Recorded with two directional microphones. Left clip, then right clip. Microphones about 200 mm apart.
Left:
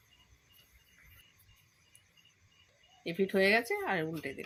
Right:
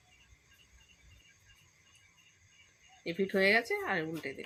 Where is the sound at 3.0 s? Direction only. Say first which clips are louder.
Even; 20° left (ahead or behind).